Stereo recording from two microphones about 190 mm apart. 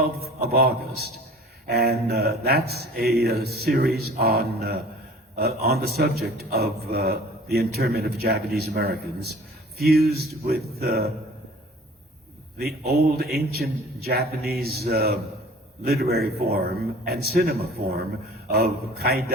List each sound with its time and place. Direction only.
0.4 s a man's voice: 55° right (ahead or behind)
12.5 s a man's voice: 55° right (ahead or behind)